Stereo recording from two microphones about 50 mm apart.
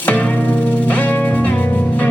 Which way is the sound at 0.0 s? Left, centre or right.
Left.